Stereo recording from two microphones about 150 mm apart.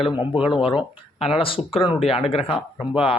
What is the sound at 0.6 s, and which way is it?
Speech, 35° left (ahead or behind).